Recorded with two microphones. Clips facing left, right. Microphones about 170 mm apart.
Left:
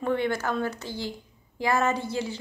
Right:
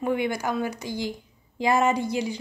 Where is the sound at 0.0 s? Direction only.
15° right (ahead or behind).